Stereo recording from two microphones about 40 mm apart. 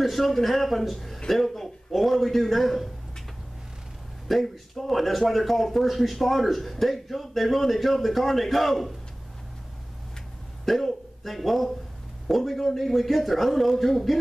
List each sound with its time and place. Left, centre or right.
0.0 s speech: centre
4.3 s speech: centre
10.6 s speech: centre